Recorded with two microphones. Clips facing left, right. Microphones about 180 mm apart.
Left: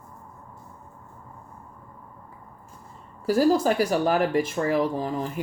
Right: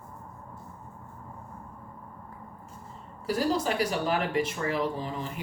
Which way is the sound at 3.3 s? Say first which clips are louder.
Left 7 dB; 45° left (ahead or behind).